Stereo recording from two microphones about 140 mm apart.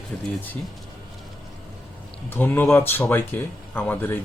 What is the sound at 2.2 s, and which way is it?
Speech, 15° left (ahead or behind).